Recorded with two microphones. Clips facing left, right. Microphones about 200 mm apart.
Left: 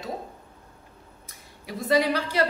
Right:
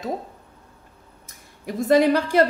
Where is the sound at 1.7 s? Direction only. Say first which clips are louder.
Right 6 dB; 50° right (ahead or behind).